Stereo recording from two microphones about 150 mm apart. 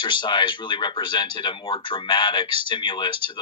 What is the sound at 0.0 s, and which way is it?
Speech, 30° left (ahead or behind).